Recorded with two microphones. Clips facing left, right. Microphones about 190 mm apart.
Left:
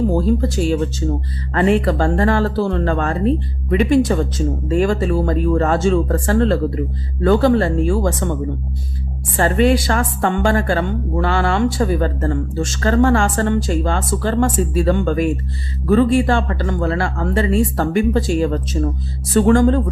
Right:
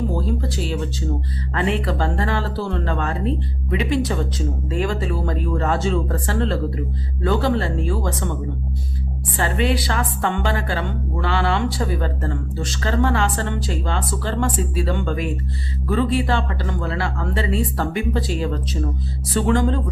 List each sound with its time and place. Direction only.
0.4 s a woman's voice: 45° left (ahead or behind)
9.4 s a woman's voice: 45° left (ahead or behind)